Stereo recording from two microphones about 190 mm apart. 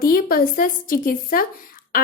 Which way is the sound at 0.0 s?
50° left (ahead or behind).